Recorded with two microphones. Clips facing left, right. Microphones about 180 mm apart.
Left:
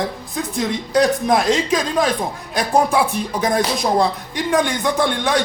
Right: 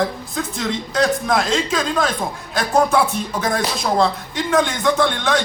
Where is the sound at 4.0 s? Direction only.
15° left (ahead or behind).